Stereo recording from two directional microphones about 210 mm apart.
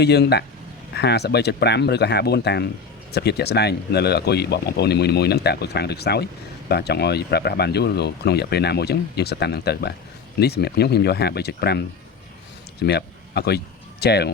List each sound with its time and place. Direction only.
0.0 s speech: 50° left (ahead or behind)
12.8 s speech: 50° left (ahead or behind)